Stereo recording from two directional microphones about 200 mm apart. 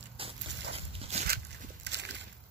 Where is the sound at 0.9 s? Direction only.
30° right (ahead or behind).